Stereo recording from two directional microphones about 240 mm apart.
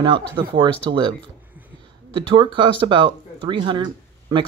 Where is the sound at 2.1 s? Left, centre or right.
Centre.